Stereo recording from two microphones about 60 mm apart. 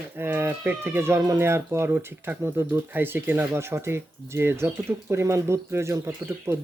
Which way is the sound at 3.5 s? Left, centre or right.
Right.